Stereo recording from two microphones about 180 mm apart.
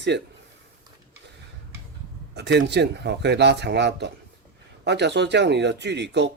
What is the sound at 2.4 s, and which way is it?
Speech, 70° right (ahead or behind).